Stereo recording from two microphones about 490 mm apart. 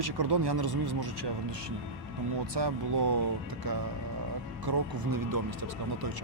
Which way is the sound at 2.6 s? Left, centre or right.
Right.